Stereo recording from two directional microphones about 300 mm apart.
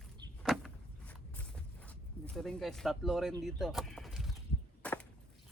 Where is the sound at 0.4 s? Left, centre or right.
Centre.